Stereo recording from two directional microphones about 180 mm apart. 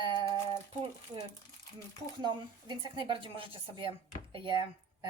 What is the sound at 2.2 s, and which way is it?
Speech, 25° right (ahead or behind).